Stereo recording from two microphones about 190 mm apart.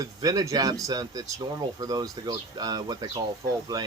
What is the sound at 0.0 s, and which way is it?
Speech, 20° right (ahead or behind).